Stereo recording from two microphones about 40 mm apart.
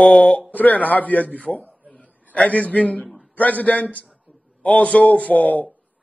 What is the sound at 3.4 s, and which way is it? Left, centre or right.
A man's voice, left.